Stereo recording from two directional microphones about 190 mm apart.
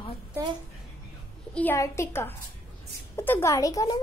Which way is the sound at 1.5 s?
10° left (ahead or behind).